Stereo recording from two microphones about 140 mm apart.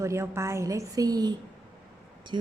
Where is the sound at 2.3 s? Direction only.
40° right (ahead or behind).